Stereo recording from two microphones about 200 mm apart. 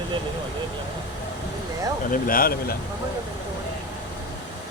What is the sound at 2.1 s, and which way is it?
Speech, 45° left (ahead or behind).